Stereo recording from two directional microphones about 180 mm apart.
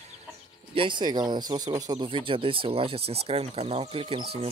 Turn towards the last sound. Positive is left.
turn(degrees=-30)  # may be behind; listen again after turning